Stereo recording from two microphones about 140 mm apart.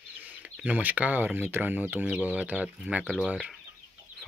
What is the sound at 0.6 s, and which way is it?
Speech, 10° right (ahead or behind).